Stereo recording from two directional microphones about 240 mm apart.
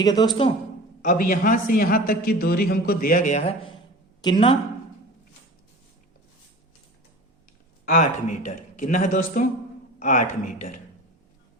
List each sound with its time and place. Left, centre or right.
0.0 s a man's voice: centre
1.0 s a man's voice: left
7.9 s a man's voice: left